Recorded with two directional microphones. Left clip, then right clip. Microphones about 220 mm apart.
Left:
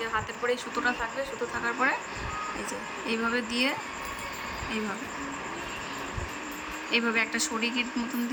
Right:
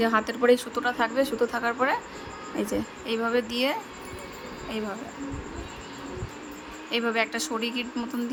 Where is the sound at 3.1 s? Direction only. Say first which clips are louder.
Right 2 dB; 45° right (ahead or behind).